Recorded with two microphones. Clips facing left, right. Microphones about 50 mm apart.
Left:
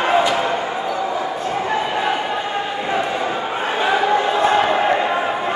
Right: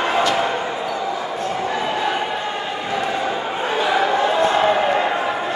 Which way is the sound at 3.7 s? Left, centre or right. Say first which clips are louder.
Left 1 dB; left.